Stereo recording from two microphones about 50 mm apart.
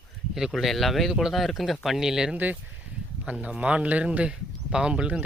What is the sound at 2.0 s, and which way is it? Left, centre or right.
Speech, centre.